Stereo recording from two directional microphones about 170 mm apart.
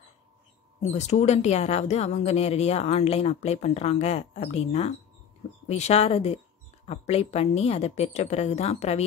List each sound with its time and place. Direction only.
0.9 s speech: 40° left (ahead or behind)